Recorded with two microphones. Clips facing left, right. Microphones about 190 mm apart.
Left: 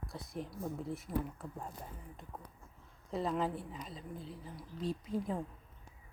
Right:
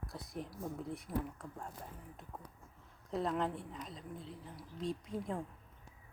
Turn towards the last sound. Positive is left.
turn(degrees=0)  # may be behind; listen again after turning